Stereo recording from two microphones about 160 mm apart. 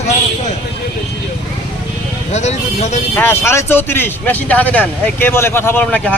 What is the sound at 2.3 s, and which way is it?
Speech, 45° left (ahead or behind).